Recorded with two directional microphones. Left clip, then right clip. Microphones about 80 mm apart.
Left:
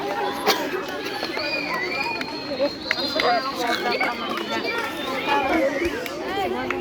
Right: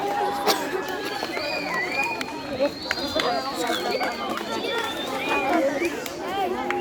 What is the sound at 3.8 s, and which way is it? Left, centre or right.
Run, left.